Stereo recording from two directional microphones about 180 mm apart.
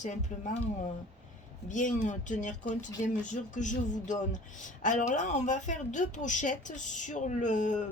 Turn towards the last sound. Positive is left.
turn(degrees=45)  # may be behind; listen again after turning